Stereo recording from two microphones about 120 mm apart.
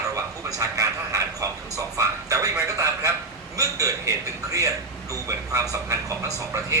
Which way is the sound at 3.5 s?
30° right (ahead or behind).